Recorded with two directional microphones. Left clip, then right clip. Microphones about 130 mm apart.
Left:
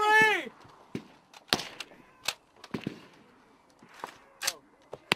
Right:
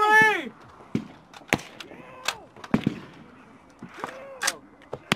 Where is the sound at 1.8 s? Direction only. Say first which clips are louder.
Right 5 dB; 45° right (ahead or behind).